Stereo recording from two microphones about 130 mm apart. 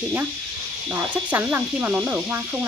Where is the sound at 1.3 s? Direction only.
15° right (ahead or behind).